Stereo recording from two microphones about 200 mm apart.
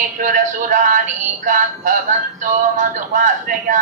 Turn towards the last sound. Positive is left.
turn(degrees=-40)  # may be behind; listen again after turning